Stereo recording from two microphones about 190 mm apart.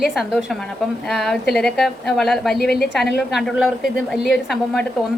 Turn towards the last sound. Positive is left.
turn(degrees=0)  # may be behind; listen again after turning